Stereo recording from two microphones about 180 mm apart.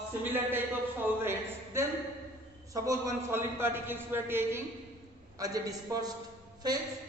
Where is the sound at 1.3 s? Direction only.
15° right (ahead or behind).